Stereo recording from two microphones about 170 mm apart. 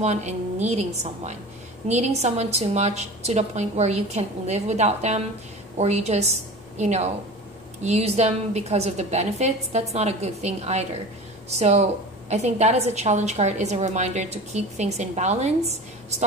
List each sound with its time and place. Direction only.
0.0 s a woman's voice: 40° right (ahead or behind)